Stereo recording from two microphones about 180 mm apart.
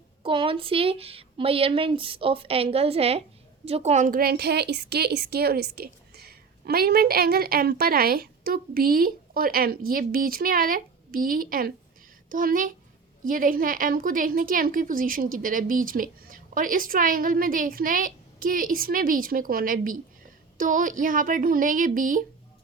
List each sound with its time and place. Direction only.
0.2 s a woman's voice: 30° right (ahead or behind); by 22.2 s 45° right (ahead or behind)